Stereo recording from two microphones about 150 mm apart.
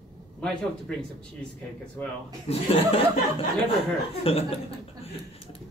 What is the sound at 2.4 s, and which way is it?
Speech, 40° left (ahead or behind).